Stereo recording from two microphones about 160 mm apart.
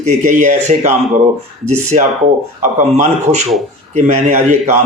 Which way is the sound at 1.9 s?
45° right (ahead or behind).